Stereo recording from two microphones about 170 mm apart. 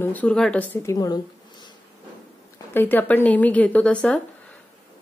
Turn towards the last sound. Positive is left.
turn(degrees=5)  # may be behind; listen again after turning